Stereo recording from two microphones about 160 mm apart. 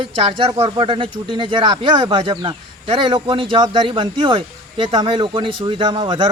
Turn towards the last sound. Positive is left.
turn(degrees=-30)  # may be behind; listen again after turning